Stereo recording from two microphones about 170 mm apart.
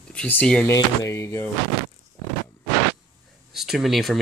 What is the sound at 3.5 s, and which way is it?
Speech, centre (ahead or behind).